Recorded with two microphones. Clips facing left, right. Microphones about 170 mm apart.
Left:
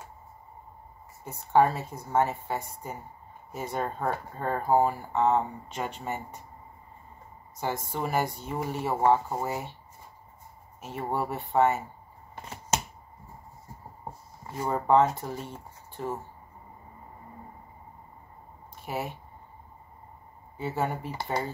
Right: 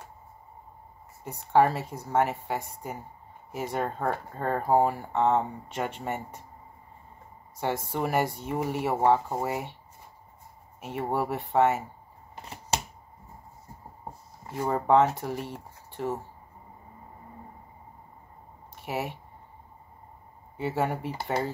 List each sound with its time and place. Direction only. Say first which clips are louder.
1.5 s speech: even; 75° right (ahead or behind)
7.6 s speech: right 2 dB; 65° right (ahead or behind)
10.8 s speech: right 2 dB; 65° right (ahead or behind)
14.6 s speech: right 1 dB; 65° right (ahead or behind)
18.8 s speech: right 1 dB; 70° right (ahead or behind)
20.5 s speech: right 2 dB; 70° right (ahead or behind)